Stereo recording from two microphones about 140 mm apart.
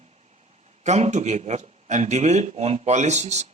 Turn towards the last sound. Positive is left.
turn(degrees=-55)  # may be behind; listen again after turning